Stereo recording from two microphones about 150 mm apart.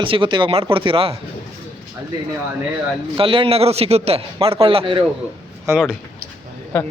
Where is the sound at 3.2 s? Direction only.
35° right (ahead or behind).